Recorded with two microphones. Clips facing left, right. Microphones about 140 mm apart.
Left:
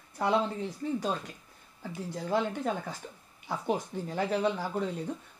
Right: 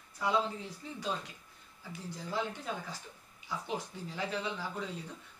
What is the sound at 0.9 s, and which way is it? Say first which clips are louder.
Speech: left 6 dB; 45° left (ahead or behind).